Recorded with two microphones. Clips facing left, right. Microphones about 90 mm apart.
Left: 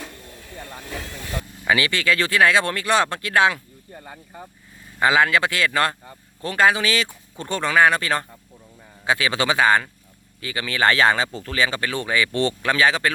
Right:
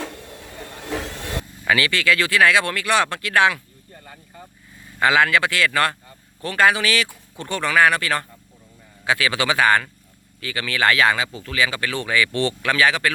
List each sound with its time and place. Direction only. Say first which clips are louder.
0.0 s vehicle: right 5 dB; 85° right
1.6 s speech: right 1 dB; 20° left (ahead or behind)
11.3 s speech: even; 40° left (ahead or behind); by 13.1 s 25° left (ahead or behind)